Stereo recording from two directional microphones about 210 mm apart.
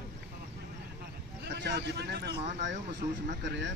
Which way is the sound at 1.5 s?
55° right (ahead or behind).